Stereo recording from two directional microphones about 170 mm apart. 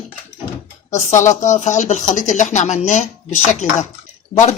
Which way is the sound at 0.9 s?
45° left (ahead or behind).